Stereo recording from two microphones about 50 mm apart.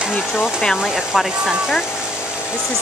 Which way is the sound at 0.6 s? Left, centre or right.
Centre.